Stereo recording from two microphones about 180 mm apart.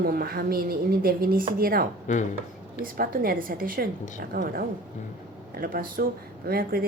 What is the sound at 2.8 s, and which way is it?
A woman's voice, 55° right (ahead or behind).